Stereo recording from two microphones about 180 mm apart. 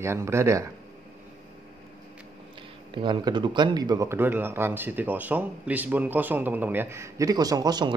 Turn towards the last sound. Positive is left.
turn(degrees=-25)  # may be behind; listen again after turning